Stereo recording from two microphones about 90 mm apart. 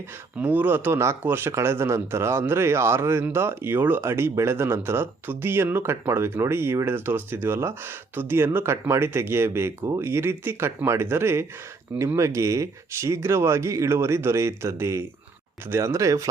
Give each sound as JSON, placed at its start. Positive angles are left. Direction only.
{"t": 0.3, "sound": "speech", "side_deg": -20}